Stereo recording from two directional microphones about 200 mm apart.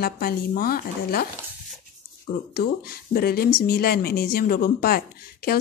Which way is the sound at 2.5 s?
50° left (ahead or behind).